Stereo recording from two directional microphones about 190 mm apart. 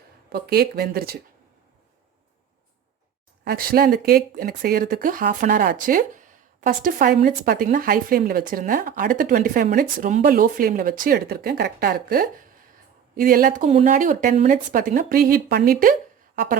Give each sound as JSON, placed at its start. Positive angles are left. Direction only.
{"t": 0.3, "sound": "speech", "side_deg": -55}
{"t": 3.4, "sound": "speech", "side_deg": -50}